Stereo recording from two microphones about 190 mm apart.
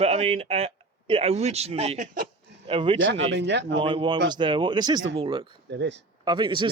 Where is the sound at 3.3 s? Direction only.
65° right (ahead or behind).